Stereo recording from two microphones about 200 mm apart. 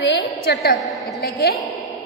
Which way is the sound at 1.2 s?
50° left (ahead or behind).